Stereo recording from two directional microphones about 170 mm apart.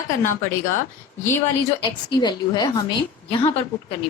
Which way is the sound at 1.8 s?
25° left (ahead or behind).